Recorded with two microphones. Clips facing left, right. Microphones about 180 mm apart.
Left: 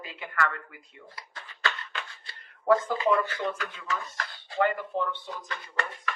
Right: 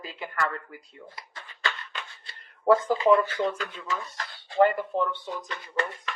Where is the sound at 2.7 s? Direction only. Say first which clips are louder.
Right 3 dB; 30° right (ahead or behind).